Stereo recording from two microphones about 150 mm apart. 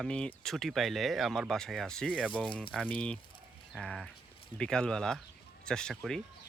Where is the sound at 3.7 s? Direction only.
5° left (ahead or behind).